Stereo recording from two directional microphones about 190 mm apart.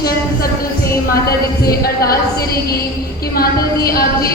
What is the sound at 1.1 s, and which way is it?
A woman's voice, 50° left (ahead or behind).